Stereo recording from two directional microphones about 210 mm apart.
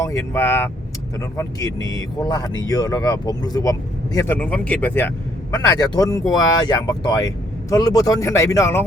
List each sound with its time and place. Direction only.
0.0 s speech: 15° left (ahead or behind)